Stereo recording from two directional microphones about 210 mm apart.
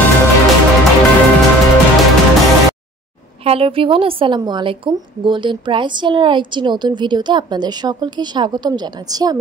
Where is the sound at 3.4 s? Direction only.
25° right (ahead or behind).